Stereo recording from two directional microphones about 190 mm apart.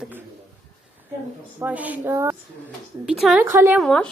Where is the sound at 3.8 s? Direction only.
5° left (ahead or behind).